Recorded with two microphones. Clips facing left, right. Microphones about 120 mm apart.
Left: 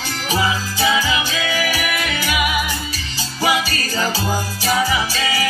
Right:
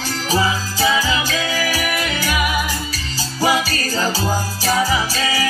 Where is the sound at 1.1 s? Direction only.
35° right (ahead or behind).